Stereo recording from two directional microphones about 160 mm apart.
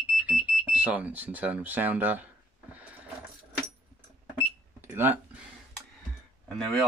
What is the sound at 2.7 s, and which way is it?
Mechanisms, 10° right (ahead or behind).